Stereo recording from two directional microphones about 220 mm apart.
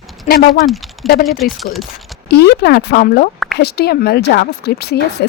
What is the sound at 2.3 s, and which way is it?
Speech, 50° left (ahead or behind).